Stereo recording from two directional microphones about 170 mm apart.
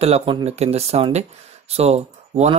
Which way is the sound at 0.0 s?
35° right (ahead or behind).